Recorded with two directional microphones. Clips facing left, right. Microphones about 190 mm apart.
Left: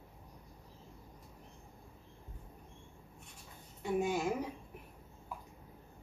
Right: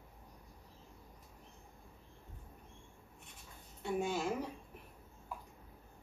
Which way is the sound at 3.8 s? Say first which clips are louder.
Left 3 dB; 10° left (ahead or behind).